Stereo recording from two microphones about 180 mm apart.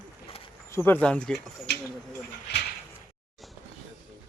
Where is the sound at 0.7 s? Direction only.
10° left (ahead or behind).